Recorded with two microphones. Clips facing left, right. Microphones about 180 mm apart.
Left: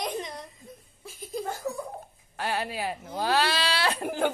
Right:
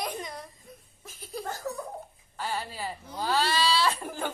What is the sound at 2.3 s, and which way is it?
A woman's voice, 65° left (ahead or behind).